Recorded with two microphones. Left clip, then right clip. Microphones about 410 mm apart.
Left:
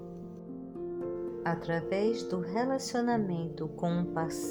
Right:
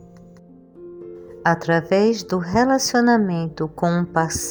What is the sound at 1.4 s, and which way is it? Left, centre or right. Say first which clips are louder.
A woman's voice: right 16 dB; right.